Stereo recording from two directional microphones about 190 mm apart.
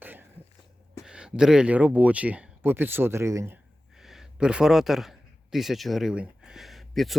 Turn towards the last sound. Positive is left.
turn(degrees=0)  # may be behind; listen again after turning